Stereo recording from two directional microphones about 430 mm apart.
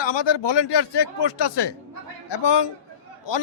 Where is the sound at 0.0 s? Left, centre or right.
Left.